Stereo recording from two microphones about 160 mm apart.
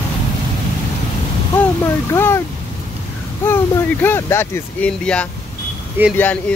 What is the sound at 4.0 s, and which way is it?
Speech, 15° left (ahead or behind).